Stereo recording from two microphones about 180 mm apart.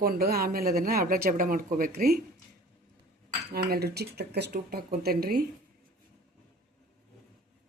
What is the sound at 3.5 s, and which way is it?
Speech, 60° right (ahead or behind).